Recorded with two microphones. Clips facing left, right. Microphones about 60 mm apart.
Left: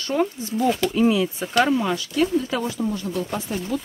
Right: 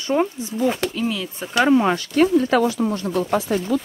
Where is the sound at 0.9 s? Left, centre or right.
Centre.